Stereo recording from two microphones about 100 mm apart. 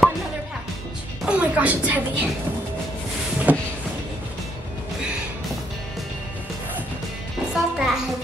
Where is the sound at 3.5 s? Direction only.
15° right (ahead or behind).